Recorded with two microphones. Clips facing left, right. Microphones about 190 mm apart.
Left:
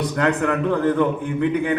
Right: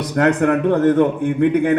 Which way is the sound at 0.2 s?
50° right (ahead or behind).